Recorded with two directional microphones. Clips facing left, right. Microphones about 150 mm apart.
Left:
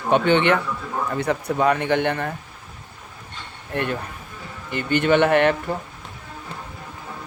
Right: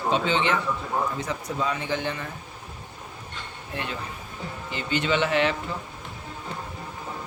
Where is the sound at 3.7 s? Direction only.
60° left (ahead or behind).